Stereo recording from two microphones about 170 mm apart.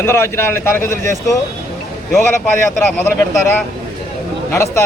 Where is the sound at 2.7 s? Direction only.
15° left (ahead or behind).